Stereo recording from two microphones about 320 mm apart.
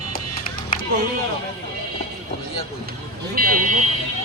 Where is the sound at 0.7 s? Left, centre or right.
Left.